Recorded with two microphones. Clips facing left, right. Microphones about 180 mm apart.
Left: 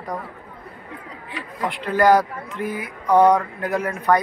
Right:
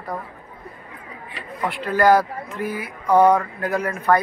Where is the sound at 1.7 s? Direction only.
20° left (ahead or behind).